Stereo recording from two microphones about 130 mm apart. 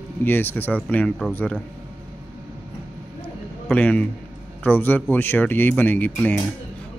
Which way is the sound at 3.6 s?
10° left (ahead or behind).